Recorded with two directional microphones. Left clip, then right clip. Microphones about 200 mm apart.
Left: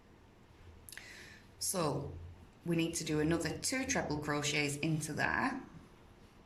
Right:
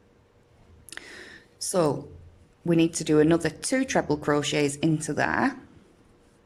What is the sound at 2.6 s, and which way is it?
Speech, 35° right (ahead or behind).